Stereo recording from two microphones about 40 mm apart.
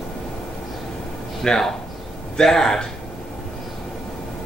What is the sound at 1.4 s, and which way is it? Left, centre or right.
Speech, centre.